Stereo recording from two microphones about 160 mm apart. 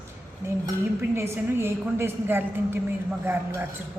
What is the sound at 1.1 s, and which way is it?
A woman's voice, 15° right (ahead or behind).